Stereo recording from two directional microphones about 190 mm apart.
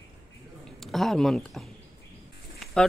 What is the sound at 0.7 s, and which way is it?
Speech, centre (ahead or behind).